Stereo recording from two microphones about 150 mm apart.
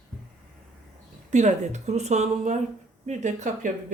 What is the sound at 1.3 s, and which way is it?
Speech, 50° right (ahead or behind).